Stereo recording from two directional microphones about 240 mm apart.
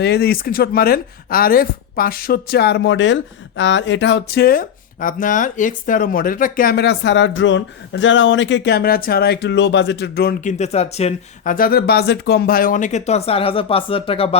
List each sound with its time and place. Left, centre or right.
0.0 s speech: left